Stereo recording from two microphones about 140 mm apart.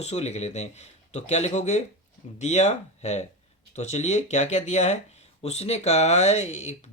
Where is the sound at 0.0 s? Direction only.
50° left (ahead or behind).